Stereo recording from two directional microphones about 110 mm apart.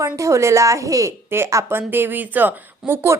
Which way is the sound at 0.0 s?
30° right (ahead or behind).